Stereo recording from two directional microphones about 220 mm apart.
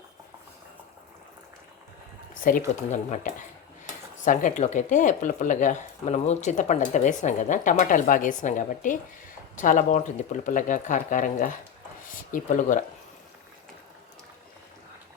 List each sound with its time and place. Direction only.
2.3 s speech: 40° left (ahead or behind)